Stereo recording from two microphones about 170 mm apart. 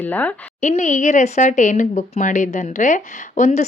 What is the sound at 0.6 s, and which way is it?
Speech, 45° left (ahead or behind).